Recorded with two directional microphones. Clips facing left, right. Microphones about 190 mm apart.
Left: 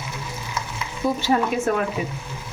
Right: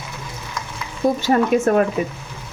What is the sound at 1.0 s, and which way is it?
Speech, 45° right (ahead or behind).